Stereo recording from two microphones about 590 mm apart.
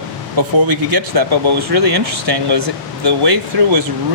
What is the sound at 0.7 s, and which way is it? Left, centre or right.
Speech, right.